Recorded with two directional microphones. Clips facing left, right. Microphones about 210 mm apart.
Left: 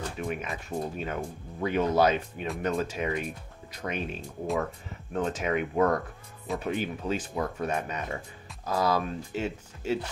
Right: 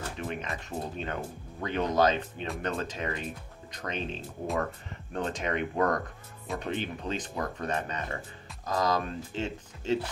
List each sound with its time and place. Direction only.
0.2 s speech: 10° left (ahead or behind)